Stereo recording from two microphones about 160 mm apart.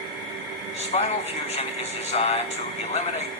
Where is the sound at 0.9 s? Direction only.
45° left (ahead or behind).